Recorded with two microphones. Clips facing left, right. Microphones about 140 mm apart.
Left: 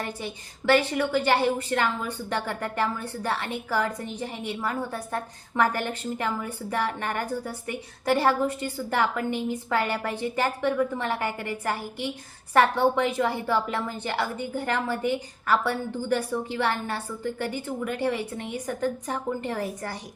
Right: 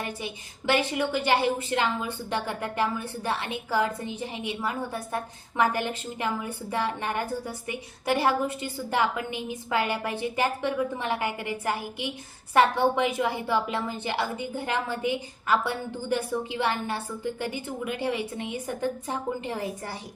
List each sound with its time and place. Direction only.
0.0 s a woman's voice: 15° right (ahead or behind)